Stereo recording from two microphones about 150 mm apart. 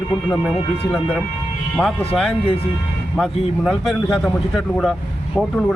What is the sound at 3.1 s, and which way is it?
Speech, centre (ahead or behind).